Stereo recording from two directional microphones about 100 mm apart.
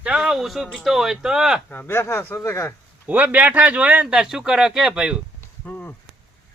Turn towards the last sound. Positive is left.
turn(degrees=20)  # may be behind; listen again after turning